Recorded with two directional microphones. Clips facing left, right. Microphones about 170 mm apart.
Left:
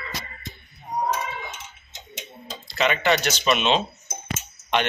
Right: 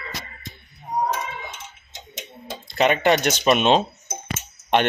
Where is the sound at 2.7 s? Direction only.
50° right (ahead or behind).